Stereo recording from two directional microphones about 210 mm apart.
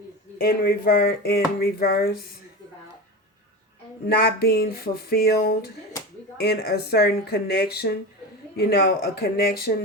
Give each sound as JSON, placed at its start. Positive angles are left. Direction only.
{"t": 0.3, "sound": "speech", "side_deg": 45}
{"t": 4.1, "sound": "speech", "side_deg": 50}